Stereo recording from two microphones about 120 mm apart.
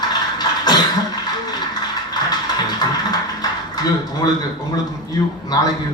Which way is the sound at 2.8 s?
35° left (ahead or behind).